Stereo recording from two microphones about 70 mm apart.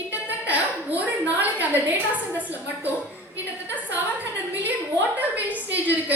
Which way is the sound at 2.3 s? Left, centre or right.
Right.